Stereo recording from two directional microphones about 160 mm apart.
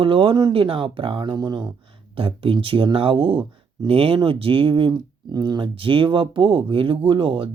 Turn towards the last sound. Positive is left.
turn(degrees=-35)  # may be behind; listen again after turning